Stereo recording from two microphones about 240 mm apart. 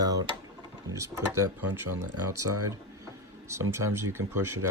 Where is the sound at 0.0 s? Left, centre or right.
Centre.